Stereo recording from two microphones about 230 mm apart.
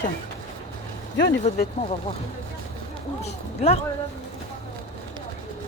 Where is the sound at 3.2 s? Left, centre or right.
Left.